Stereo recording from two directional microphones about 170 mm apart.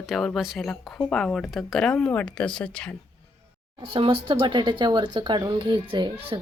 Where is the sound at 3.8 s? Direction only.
30° right (ahead or behind).